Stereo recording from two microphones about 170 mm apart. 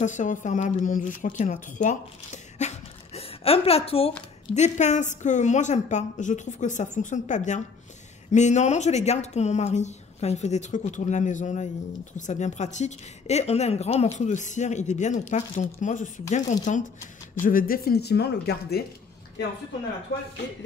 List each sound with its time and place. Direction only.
0.0 s a woman's voice: 45° left (ahead or behind)
17.4 s speech: 55° left (ahead or behind)